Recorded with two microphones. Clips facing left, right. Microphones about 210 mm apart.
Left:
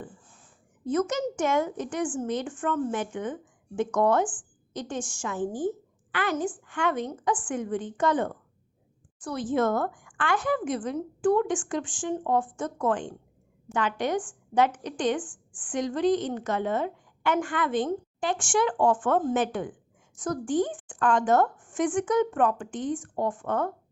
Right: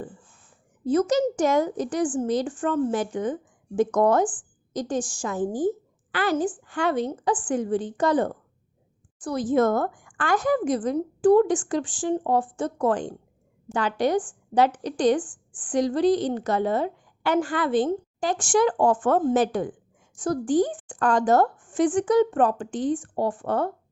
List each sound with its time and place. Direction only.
0.9 s a woman's voice: 35° right (ahead or behind)